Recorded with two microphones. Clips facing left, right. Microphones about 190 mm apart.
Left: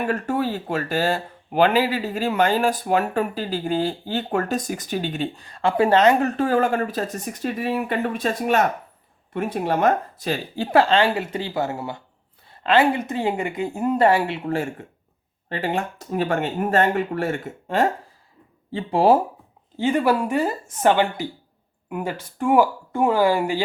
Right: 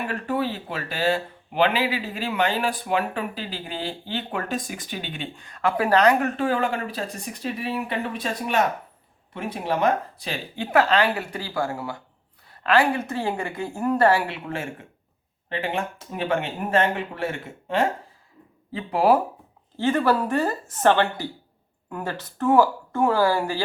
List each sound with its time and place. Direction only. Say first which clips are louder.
0.1 s speech: left 3 dB; 45° left (ahead or behind); by 6.3 s 25° left (ahead or behind)
6.3 s speech: left 4 dB; 40° left (ahead or behind); by 14.3 s 20° left (ahead or behind)
14.4 s speech: left 6 dB; 35° left (ahead or behind)
18.7 s speech: left 3 dB; 25° left (ahead or behind)
19.7 s speech: left 1 dB; 15° left (ahead or behind)